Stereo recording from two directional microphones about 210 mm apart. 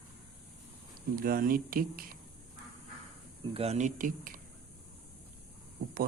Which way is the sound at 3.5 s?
30° right (ahead or behind).